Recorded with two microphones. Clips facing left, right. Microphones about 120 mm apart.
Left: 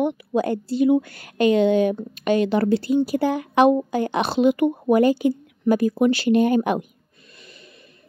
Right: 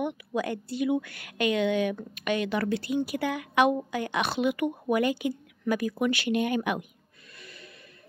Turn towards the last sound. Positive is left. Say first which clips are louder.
# left 1 dB
turn(degrees=25)  # may be behind; listen again after turning